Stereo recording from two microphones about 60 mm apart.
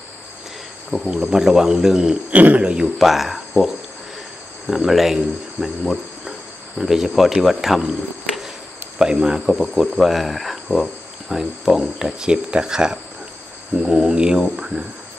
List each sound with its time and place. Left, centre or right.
1.0 s speech: centre
2.3 s a man's voice: right
3.0 s speech: centre
8.9 s speech: centre